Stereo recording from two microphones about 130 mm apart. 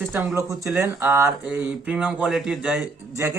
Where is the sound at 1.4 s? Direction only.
10° right (ahead or behind).